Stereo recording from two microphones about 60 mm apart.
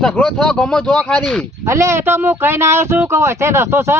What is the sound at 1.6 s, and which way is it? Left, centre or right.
Speech, right.